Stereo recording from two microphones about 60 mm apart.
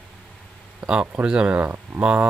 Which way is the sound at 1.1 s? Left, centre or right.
Centre.